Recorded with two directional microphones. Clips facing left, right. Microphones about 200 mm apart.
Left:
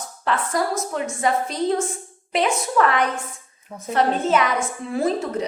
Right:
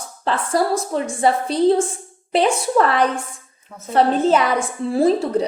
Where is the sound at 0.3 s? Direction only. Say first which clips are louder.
Right 4 dB; 30° right (ahead or behind).